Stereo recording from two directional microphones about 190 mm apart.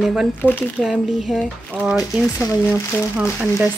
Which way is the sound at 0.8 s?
Centre (ahead or behind).